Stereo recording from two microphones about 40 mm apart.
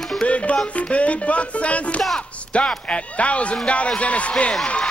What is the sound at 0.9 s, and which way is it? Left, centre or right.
Speech, left.